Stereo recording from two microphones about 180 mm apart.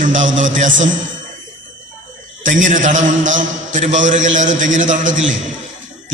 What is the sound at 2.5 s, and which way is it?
A man's voice, 45° right (ahead or behind).